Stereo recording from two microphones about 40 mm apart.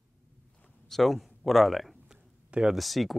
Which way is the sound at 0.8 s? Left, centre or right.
Centre.